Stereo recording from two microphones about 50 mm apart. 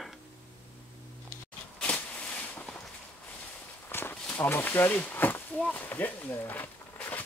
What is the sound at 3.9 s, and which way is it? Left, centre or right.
Walk, left.